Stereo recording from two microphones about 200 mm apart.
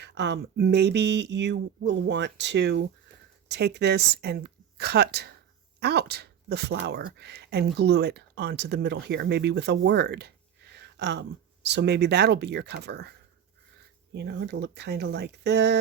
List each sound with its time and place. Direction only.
0.0 s speech: 60° right (ahead or behind)